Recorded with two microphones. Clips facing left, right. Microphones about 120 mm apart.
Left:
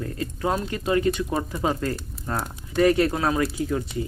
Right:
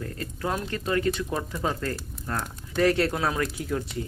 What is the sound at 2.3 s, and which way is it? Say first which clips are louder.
Speech: left 4 dB; 5° left (ahead or behind).